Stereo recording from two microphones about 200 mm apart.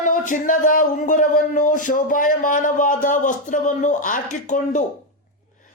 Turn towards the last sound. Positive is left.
turn(degrees=40)  # may be behind; listen again after turning